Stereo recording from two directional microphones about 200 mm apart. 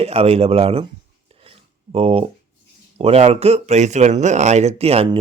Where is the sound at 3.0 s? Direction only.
30° right (ahead or behind).